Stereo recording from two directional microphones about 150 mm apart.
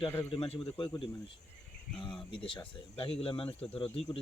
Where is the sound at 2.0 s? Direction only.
35° left (ahead or behind).